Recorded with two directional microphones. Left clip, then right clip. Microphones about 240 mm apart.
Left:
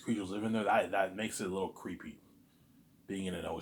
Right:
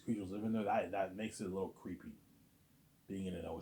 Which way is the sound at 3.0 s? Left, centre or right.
Left.